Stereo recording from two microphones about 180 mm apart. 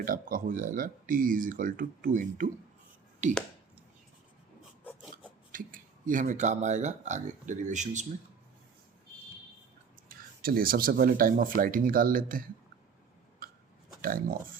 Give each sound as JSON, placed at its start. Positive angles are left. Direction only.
{"t": 0.0, "sound": "speech", "side_deg": -50}
{"t": 5.1, "sound": "speech", "side_deg": -50}
{"t": 10.1, "sound": "speech", "side_deg": -55}
{"t": 13.4, "sound": "burping", "side_deg": -50}
{"t": 14.0, "sound": "speech", "side_deg": -50}